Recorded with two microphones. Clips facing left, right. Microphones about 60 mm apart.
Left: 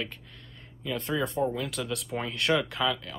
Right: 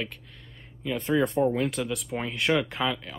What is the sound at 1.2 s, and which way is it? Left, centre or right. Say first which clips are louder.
Speech: right 6 dB; right.